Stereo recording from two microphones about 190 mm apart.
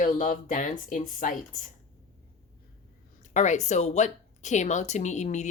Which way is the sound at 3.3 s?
40° left (ahead or behind).